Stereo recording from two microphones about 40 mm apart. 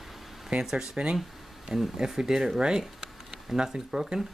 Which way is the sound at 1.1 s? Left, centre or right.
Centre.